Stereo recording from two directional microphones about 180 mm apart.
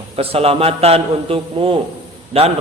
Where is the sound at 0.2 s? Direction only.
35° right (ahead or behind).